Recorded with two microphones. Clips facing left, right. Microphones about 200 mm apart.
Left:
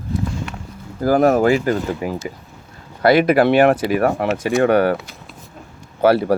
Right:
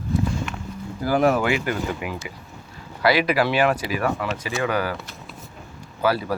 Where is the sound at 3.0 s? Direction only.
50° left (ahead or behind).